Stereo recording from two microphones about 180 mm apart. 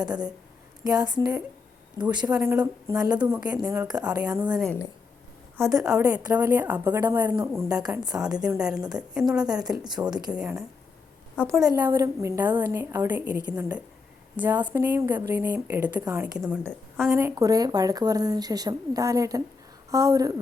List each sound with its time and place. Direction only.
0.1 s a woman's voice: 5° right (ahead or behind)
0.9 s speech: 20° right (ahead or behind)
2.0 s a woman's voice: 5° right (ahead or behind)
2.6 s a woman's voice: 20° right (ahead or behind)
4.4 s a woman's voice: 5° right (ahead or behind)
7.8 s a woman's voice: 5° right (ahead or behind)
10.1 s speech: 20° right (ahead or behind)
10.3 s a woman's voice: 5° right (ahead or behind)
11.4 s a woman's voice: 10° left (ahead or behind)
11.8 s a woman's voice: 15° right (ahead or behind)